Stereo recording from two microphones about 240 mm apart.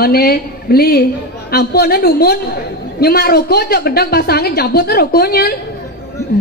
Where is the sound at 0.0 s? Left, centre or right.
Left.